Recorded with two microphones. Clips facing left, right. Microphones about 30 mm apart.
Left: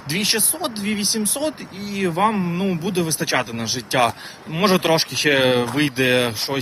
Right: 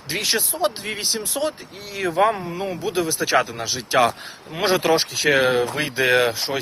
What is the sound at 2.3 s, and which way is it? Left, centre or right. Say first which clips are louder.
Speech: left 4 dB; centre.